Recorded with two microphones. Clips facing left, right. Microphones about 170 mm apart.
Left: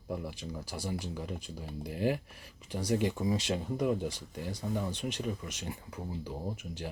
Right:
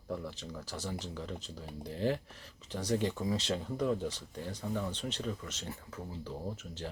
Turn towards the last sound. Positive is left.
turn(degrees=15)  # may be behind; listen again after turning